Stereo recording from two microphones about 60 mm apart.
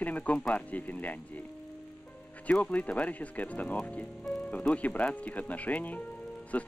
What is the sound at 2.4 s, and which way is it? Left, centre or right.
Speech, left.